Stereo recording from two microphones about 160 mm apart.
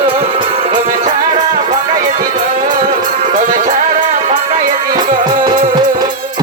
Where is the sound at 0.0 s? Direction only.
35° right (ahead or behind).